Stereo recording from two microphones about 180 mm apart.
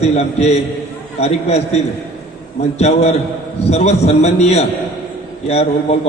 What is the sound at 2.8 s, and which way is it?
A man's voice, 35° left (ahead or behind).